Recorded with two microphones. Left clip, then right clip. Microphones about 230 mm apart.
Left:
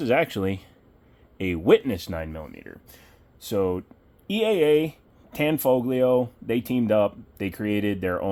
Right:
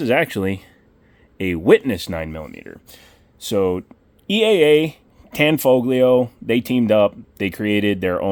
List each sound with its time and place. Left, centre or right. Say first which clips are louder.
0.0 s speech: right 4 dB; right